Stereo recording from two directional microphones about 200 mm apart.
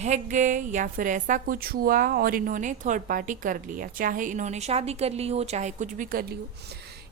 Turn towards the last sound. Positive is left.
turn(degrees=-45)  # may be behind; listen again after turning